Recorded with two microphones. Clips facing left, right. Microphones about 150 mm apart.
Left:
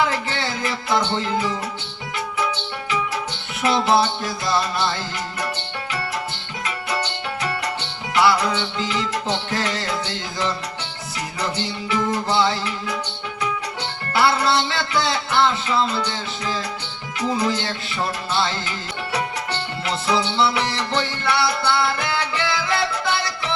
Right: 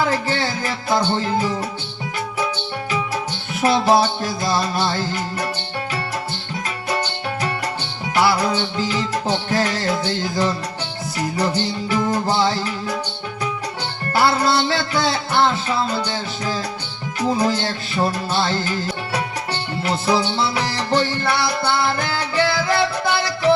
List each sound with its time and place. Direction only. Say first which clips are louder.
0.1 s music: right 4 dB; 35° right (ahead or behind)
3.6 s music: right 2 dB; 40° right (ahead or behind)
8.1 s music: even; 40° right (ahead or behind)
14.1 s music: right 1 dB; 35° right (ahead or behind)
19.8 s music: right 3 dB; 35° right (ahead or behind)